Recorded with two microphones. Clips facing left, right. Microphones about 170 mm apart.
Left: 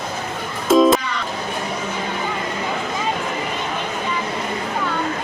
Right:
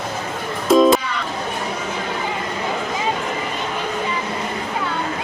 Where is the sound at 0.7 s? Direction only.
Centre (ahead or behind).